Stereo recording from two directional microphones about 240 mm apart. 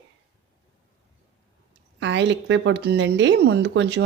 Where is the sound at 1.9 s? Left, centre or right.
Right.